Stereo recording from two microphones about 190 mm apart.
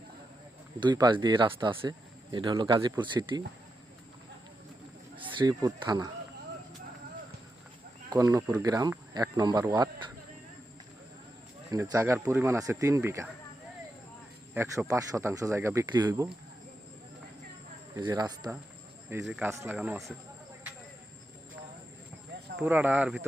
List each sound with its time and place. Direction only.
0.8 s speech: 20° right (ahead or behind)
5.1 s speech: 25° right (ahead or behind)
8.1 s speech: 20° right (ahead or behind)
11.7 s speech: 15° right (ahead or behind)
14.5 s speech: 10° right (ahead or behind)
17.9 s speech: 20° right (ahead or behind)
19.2 s speech: 5° right (ahead or behind)
22.6 s speech: 10° right (ahead or behind)